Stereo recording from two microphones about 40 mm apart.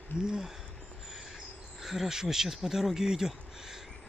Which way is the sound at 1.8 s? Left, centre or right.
Centre.